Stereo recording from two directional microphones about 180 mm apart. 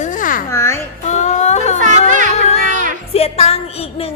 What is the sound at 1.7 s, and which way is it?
Speech, 45° right (ahead or behind).